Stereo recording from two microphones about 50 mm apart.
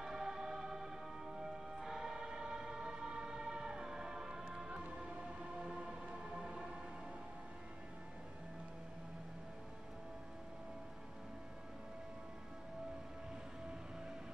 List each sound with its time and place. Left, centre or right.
0.0 s music: centre